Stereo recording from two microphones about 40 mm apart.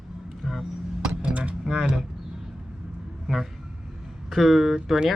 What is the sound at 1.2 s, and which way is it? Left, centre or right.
Music, right.